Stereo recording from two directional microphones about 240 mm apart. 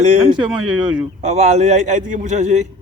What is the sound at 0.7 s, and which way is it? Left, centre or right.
Speech, centre.